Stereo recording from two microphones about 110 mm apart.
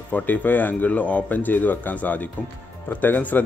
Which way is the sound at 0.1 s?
15° left (ahead or behind).